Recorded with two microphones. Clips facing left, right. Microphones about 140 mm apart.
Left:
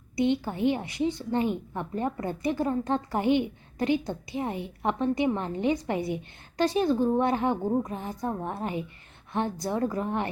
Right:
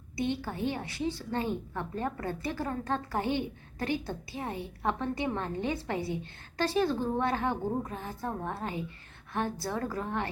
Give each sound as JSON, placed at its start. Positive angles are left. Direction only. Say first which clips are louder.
{"t": 0.2, "sound": "a woman's voice", "louder": "left 6 dB", "side_deg": 20}